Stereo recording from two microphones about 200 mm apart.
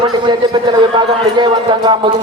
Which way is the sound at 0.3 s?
20° right (ahead or behind).